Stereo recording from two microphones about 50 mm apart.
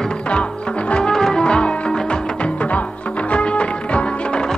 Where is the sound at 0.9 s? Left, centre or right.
Centre.